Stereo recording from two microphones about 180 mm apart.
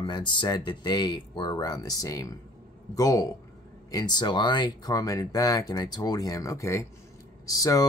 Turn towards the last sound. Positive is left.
turn(degrees=20)  # may be behind; listen again after turning